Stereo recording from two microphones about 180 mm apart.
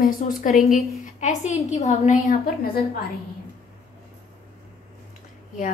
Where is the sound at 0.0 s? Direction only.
55° left (ahead or behind).